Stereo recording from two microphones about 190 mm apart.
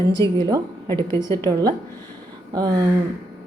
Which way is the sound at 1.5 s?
25° right (ahead or behind).